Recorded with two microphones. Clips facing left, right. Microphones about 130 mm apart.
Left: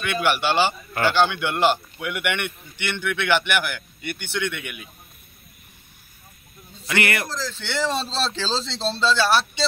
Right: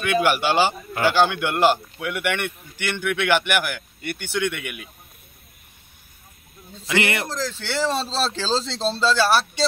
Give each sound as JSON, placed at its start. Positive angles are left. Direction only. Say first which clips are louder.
{"t": 0.0, "sound": "a man's voice", "louder": "right 2 dB", "side_deg": -5}
{"t": 6.9, "sound": "speech", "louder": "right 1 dB", "side_deg": -25}
{"t": 7.7, "sound": "a man's voice", "louder": "right 1 dB", "side_deg": -5}